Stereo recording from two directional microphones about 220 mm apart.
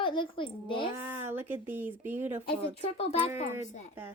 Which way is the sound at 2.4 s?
30° left (ahead or behind).